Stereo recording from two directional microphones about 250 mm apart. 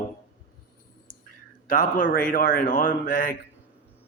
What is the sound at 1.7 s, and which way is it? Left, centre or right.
Speech, left.